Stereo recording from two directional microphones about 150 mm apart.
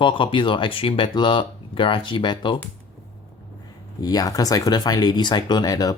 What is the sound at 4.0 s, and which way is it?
Speech, 25° left (ahead or behind).